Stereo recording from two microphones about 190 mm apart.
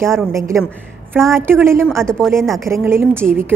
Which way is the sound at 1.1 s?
Centre (ahead or behind).